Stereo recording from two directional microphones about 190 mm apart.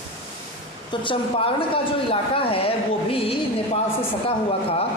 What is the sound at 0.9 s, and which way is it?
Speech, 25° left (ahead or behind).